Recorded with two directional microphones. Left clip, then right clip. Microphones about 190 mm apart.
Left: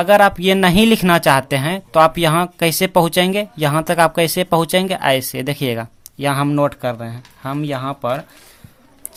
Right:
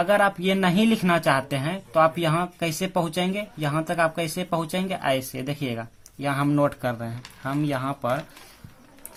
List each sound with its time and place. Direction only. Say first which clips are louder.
0.0 s speech: left 9 dB; 35° left (ahead or behind)